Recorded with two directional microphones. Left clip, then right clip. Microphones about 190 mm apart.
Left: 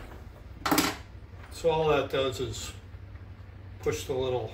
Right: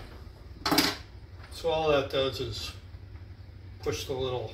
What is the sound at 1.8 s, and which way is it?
Speech, 15° left (ahead or behind).